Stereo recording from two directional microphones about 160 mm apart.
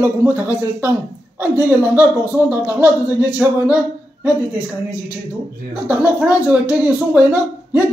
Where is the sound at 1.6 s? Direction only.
10° right (ahead or behind).